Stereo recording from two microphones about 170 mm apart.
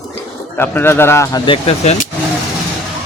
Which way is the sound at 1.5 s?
35° left (ahead or behind).